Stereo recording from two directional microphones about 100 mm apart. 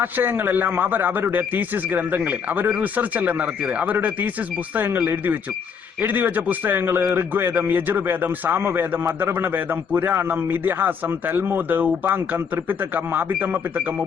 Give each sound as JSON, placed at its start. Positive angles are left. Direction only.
{"t": 0.0, "sound": "speech", "side_deg": -20}